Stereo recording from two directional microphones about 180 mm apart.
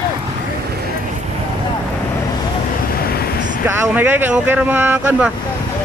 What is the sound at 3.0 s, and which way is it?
Vehicle, 60° left (ahead or behind).